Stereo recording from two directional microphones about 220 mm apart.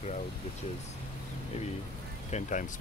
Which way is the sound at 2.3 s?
35° left (ahead or behind).